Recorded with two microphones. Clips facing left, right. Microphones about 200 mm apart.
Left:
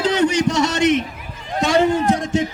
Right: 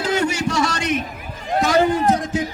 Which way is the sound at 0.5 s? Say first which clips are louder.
Left 5 dB; 25° left (ahead or behind).